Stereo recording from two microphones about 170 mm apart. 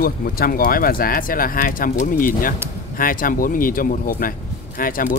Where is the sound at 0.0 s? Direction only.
60° left (ahead or behind).